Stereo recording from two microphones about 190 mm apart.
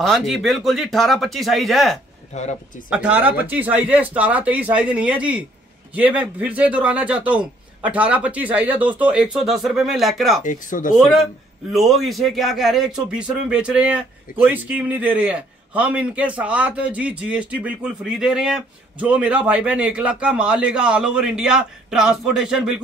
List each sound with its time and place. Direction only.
0.0 s a man's voice: centre (ahead or behind)
2.3 s speech: 35° left (ahead or behind)
2.9 s speech: 5° right (ahead or behind)
10.4 s speech: 45° left (ahead or behind)
11.7 s a man's voice: centre (ahead or behind)